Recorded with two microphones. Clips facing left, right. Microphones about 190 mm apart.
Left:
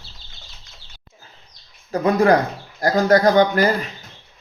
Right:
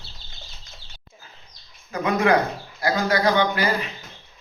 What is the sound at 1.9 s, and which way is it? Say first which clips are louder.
A man's voice: left 4 dB; 35° left (ahead or behind).